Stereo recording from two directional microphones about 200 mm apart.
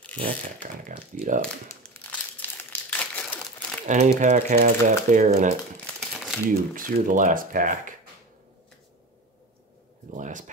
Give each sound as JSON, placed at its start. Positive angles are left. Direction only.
{"t": 0.2, "sound": "speech", "side_deg": -40}
{"t": 1.8, "sound": "crumpling", "side_deg": 10}
{"t": 3.8, "sound": "speech", "side_deg": -35}
{"t": 5.9, "sound": "crumpling", "side_deg": 0}
{"t": 6.5, "sound": "speech", "side_deg": -40}
{"t": 10.1, "sound": "a sound", "side_deg": -40}